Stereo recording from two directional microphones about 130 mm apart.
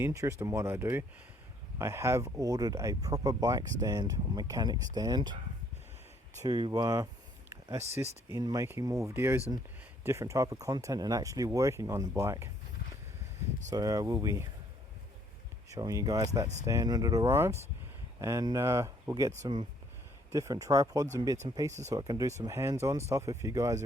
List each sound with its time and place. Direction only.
0.0 s speech: 20° right (ahead or behind)
6.4 s speech: 30° right (ahead or behind)
13.7 s speech: 30° right (ahead or behind)
15.7 s speech: 25° right (ahead or behind)
20.3 s speech: 25° right (ahead or behind)